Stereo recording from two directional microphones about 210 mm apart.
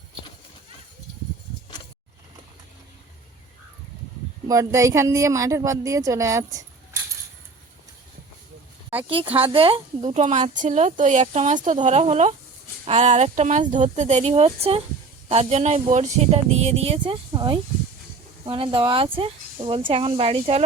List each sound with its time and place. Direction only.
4.4 s a woman's voice: 15° right (ahead or behind)
9.0 s speech: 25° right (ahead or behind)